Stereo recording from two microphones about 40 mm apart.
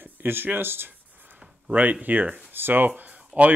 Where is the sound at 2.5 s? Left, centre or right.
Right.